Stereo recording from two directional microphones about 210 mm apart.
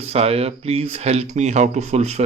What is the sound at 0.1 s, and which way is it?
Speech, 30° right (ahead or behind).